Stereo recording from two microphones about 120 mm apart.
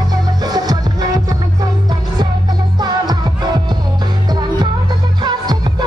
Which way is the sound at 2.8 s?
35° right (ahead or behind).